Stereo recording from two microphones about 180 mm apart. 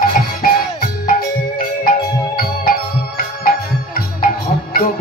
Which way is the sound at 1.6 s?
55° left (ahead or behind).